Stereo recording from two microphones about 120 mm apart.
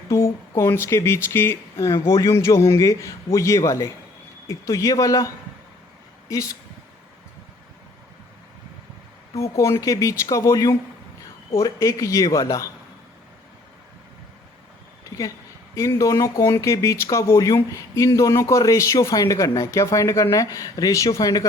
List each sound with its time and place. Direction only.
0.1 s speech: 25° left (ahead or behind)
9.3 s speech: 25° left (ahead or behind)
15.1 s speech: 25° left (ahead or behind)